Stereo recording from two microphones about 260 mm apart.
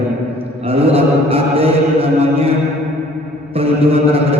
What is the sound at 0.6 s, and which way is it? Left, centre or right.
Mantra, right.